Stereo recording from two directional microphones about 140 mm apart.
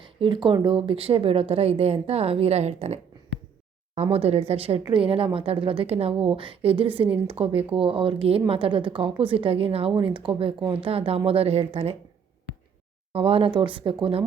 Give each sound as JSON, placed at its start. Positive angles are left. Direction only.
{"t": 0.0, "sound": "speech", "side_deg": -35}
{"t": 13.1, "sound": "speech", "side_deg": -40}